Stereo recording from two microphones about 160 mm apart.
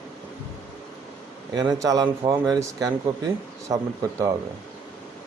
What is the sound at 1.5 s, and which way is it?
A man's voice, 20° right (ahead or behind).